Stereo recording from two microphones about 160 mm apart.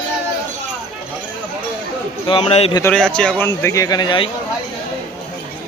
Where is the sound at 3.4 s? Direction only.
20° left (ahead or behind).